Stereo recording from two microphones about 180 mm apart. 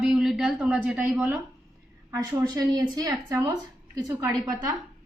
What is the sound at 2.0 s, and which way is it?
A woman's voice, 20° right (ahead or behind).